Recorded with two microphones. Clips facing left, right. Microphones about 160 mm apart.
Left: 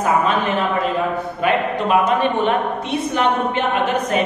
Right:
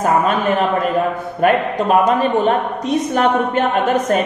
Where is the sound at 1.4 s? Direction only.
40° right (ahead or behind).